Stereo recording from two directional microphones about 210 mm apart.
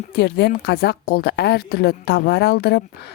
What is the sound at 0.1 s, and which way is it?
A woman's voice, 50° left (ahead or behind).